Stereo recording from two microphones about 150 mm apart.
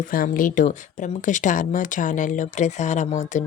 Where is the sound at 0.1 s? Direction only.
70° left (ahead or behind).